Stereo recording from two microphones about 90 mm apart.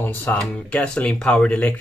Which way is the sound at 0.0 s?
20° left (ahead or behind).